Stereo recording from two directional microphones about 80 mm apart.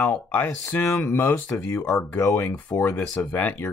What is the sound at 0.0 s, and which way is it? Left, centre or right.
Speech, left.